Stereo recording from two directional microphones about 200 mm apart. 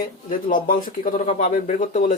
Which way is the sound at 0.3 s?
45° left (ahead or behind).